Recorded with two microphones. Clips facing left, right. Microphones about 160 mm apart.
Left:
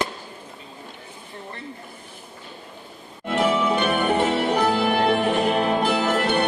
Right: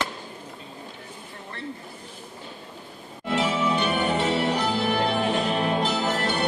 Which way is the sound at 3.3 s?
55° left (ahead or behind).